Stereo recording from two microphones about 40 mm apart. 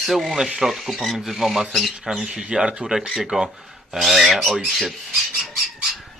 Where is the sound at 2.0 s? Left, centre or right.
Centre.